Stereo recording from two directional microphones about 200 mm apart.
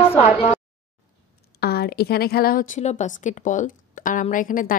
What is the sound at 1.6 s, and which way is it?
Speech, 50° left (ahead or behind).